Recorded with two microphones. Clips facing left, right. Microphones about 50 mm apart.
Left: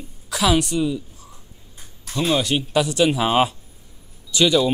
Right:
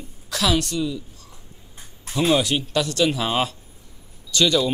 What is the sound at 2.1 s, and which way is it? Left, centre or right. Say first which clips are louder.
Speech: right 1 dB; centre.